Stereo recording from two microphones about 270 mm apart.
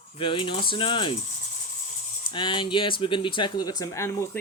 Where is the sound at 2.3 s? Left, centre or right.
Centre.